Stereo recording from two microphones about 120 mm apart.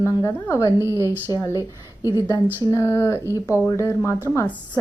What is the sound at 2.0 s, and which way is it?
A woman's voice, 35° left (ahead or behind).